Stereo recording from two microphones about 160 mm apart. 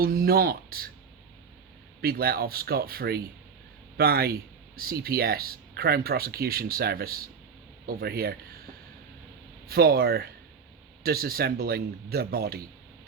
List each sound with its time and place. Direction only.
0.0 s speech: 70° right (ahead or behind)
2.0 s a man's voice: 75° right (ahead or behind)
9.6 s speech: 70° right (ahead or behind)